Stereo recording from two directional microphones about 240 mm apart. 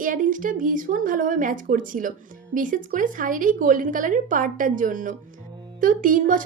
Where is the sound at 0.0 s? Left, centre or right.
Right.